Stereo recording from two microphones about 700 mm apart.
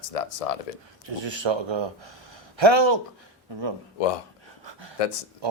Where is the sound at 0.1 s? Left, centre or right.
Left.